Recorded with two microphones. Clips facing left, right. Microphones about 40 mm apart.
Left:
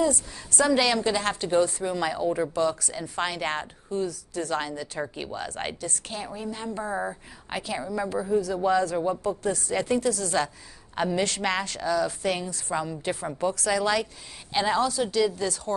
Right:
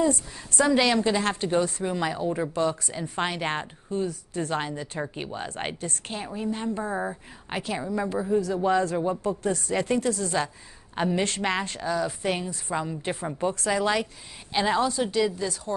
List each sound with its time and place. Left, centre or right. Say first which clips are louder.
0.0 s a woman's voice: right 1 dB; right
1.5 s a woman's voice: left 2 dB; centre
14.5 s a woman's voice: even; centre
14.8 s a woman's voice: even; right